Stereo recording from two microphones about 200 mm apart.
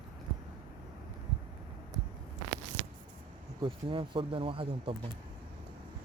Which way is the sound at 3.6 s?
25° right (ahead or behind).